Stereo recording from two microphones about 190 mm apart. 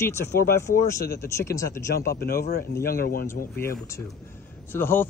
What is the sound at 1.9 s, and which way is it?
A man's voice, 55° left (ahead or behind).